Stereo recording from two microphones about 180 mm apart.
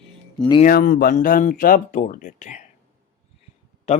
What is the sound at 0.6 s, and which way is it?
Speech, 55° left (ahead or behind).